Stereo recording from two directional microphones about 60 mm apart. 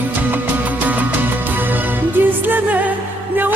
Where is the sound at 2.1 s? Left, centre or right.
Right.